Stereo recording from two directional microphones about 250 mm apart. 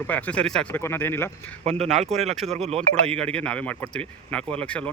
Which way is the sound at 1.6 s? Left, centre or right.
Right.